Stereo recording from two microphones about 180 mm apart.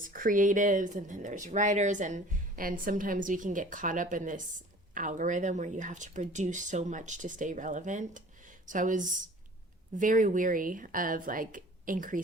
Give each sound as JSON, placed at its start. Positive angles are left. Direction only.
{"t": 0.0, "sound": "speech", "side_deg": -50}